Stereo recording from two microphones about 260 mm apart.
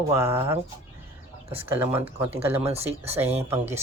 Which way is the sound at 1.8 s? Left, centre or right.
Centre.